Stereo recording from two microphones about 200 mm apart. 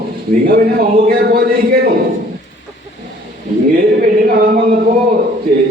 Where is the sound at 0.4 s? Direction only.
50° right (ahead or behind).